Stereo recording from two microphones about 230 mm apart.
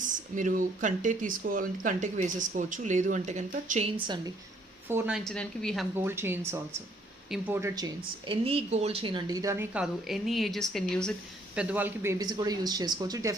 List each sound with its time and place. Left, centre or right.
0.3 s speech: right
4.9 s a woman's voice: centre
6.0 s speech: centre